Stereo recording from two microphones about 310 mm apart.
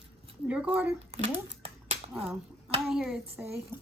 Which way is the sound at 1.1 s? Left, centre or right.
Centre.